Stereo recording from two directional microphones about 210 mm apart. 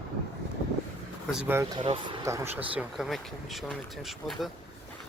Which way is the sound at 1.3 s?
5° right (ahead or behind).